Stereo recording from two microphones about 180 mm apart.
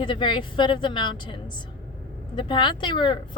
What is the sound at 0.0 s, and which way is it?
Speech, 25° left (ahead or behind).